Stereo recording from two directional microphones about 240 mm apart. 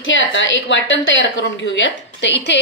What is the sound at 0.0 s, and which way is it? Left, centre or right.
A woman's voice, left.